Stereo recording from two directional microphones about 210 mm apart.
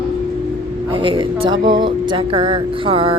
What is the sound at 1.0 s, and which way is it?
Speech, 25° right (ahead or behind).